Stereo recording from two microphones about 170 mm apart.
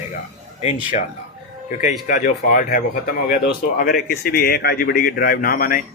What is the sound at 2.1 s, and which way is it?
Speech, 50° left (ahead or behind).